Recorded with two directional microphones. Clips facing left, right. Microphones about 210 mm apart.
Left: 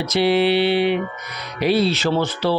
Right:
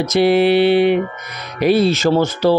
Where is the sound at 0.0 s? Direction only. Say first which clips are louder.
Right 4 dB; 45° right (ahead or behind).